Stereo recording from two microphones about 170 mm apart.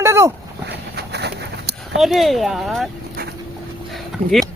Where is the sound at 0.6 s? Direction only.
70° right (ahead or behind).